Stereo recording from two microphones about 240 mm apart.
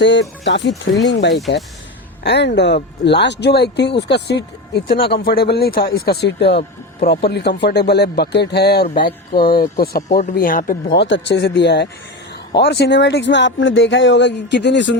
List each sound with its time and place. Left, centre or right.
0.0 s speech: left
10.9 s speech: left